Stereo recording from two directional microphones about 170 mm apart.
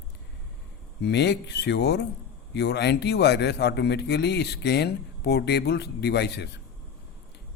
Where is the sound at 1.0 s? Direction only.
85° left.